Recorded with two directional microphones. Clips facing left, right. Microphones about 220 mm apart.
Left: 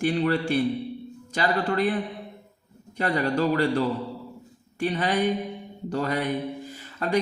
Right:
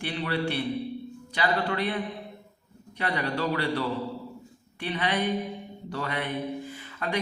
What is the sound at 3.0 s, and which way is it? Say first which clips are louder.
Speech: left 5 dB; 40° left (ahead or behind).